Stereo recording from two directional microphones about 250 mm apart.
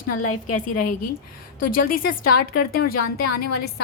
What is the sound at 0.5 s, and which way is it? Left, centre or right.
A woman's voice, left.